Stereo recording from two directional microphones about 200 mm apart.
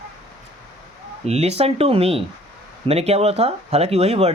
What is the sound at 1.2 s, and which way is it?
Speech, 30° right (ahead or behind).